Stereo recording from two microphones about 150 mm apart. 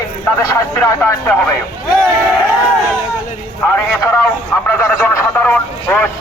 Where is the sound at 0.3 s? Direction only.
20° left (ahead or behind).